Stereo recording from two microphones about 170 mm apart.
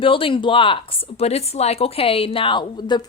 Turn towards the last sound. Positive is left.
turn(degrees=25)  # may be behind; listen again after turning